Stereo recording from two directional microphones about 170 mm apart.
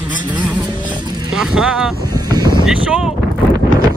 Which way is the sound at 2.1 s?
25° right (ahead or behind).